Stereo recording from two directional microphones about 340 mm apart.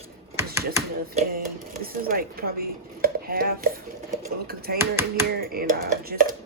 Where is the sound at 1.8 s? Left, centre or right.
Right.